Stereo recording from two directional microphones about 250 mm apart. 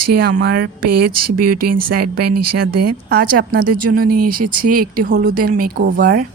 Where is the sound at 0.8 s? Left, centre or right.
Right.